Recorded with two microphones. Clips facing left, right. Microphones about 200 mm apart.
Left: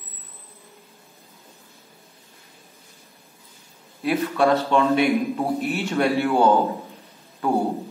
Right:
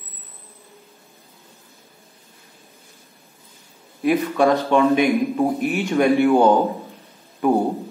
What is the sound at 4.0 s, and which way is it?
A man's voice, 15° right (ahead or behind).